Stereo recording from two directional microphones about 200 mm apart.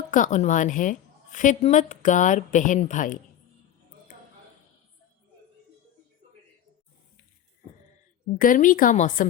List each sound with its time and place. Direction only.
0.1 s a woman's voice: 40° left (ahead or behind)
8.4 s a woman's voice: 45° left (ahead or behind)